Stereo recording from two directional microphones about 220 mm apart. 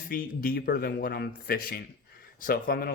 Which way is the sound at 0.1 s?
45° left (ahead or behind).